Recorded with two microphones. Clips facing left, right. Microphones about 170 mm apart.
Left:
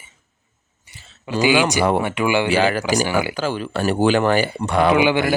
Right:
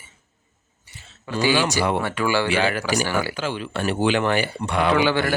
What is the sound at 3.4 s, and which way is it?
Speech, 40° left (ahead or behind).